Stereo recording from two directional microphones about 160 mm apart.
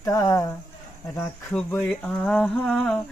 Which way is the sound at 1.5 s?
5° left (ahead or behind).